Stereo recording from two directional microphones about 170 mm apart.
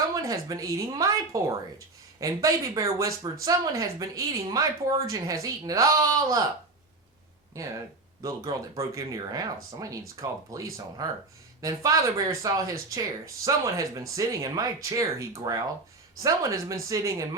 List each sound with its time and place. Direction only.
0.1 s speech: 20° right (ahead or behind)
8.2 s speech: 20° right (ahead or behind)